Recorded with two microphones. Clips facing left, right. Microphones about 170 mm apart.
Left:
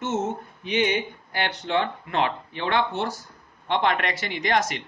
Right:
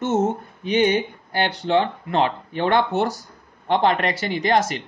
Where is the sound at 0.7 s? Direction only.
40° right (ahead or behind).